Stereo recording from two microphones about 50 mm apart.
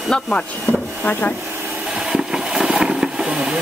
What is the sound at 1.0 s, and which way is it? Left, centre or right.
Speech, left.